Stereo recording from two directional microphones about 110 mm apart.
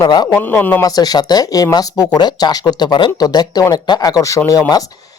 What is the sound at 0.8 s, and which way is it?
Speech, 35° left (ahead or behind).